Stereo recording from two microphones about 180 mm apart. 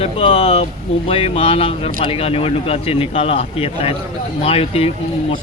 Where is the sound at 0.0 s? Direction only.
30° left (ahead or behind).